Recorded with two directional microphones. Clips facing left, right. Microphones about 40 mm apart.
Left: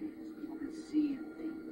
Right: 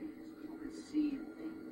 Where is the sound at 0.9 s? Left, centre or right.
Centre.